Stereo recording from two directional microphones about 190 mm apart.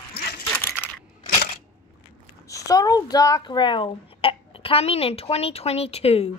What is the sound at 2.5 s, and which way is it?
A child's voice, 20° left (ahead or behind).